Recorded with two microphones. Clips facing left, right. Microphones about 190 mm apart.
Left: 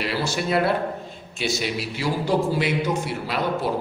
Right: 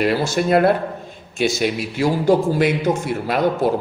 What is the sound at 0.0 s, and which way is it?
A man's voice, 50° right (ahead or behind).